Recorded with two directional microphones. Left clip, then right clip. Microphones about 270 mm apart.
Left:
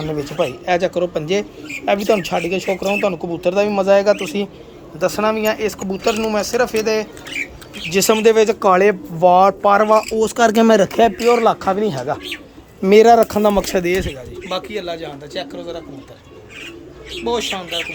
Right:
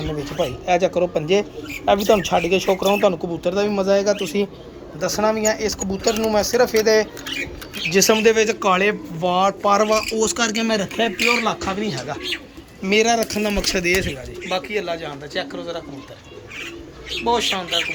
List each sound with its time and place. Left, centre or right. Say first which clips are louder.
0.1 s speech: left 4 dB; centre
5.9 s speech: left 2 dB; centre
6.3 s speech: right 1 dB; centre
10.5 s speech: left 9 dB; left; by 15.8 s centre
17.2 s speech: right 1 dB; centre